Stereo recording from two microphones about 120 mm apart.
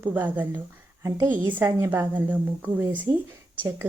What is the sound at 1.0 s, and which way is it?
Speech, 30° right (ahead or behind).